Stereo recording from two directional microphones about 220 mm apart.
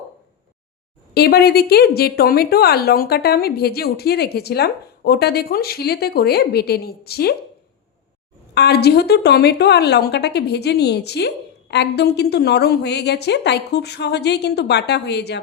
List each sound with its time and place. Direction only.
1.1 s a woman's voice: 45° left (ahead or behind)
8.5 s a woman's voice: 50° left (ahead or behind)